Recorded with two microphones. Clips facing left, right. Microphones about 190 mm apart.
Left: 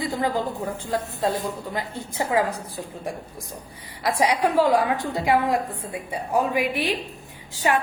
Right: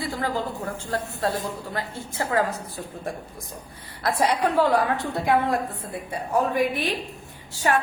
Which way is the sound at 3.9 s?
10° left (ahead or behind).